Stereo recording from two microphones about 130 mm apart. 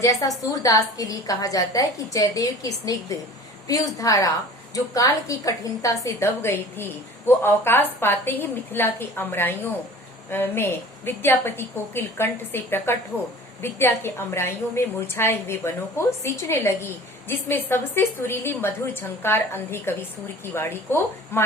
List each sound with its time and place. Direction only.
0.5 s a woman's voice: 25° left (ahead or behind)